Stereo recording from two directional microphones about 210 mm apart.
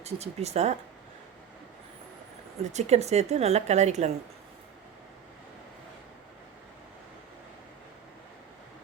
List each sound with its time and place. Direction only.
0.0 s a woman's voice: 30° right (ahead or behind)
2.7 s a woman's voice: 30° right (ahead or behind)